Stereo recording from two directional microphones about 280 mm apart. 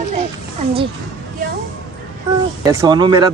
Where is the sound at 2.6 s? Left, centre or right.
Centre.